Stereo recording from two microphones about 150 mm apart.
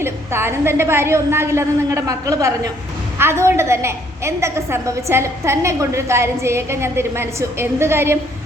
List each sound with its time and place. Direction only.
0.0 s a woman's voice: 15° right (ahead or behind)